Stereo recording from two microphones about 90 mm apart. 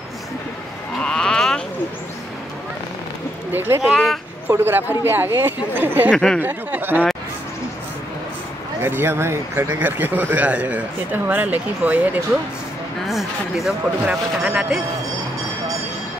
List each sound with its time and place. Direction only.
0.9 s a sound: 5° left (ahead or behind)
3.5 s speech: 25° right (ahead or behind)
3.8 s speech: centre (ahead or behind)
4.5 s speech: 25° right (ahead or behind)
6.1 s speech: 5° left (ahead or behind)
6.4 s speech: 20° right (ahead or behind)
8.8 s speech: 25° right (ahead or behind)
13.0 s speech: centre (ahead or behind)